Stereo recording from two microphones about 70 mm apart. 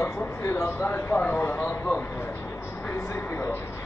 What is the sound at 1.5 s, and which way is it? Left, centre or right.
Speech, left.